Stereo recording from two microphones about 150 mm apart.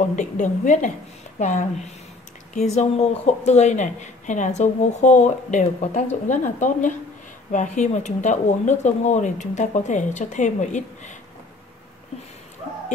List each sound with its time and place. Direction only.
0.1 s a woman's voice: 55° left (ahead or behind)